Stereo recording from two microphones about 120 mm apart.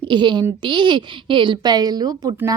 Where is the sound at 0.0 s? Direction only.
40° right (ahead or behind).